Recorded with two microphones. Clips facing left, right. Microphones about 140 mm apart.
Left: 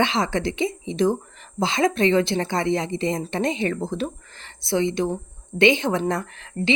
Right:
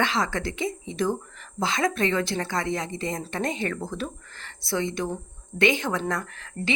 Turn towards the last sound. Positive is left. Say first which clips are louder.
# left 5 dB
turn(degrees=25)  # may be behind; listen again after turning